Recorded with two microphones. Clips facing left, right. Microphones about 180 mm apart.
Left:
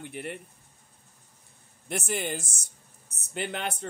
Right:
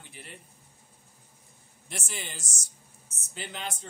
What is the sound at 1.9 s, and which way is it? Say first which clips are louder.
Speech: left 10 dB; 55° left (ahead or behind).